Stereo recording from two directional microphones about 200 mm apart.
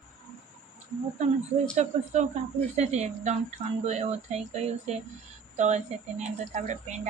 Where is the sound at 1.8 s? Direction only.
35° right (ahead or behind).